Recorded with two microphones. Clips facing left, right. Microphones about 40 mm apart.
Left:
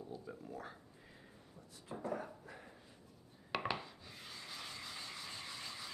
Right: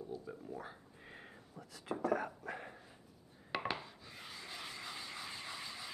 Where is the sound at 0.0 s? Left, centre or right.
Centre.